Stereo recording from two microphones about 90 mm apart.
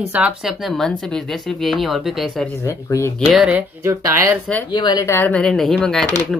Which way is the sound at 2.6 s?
30° left (ahead or behind).